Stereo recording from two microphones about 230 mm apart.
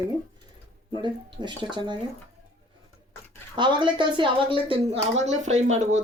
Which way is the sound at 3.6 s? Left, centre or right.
Centre.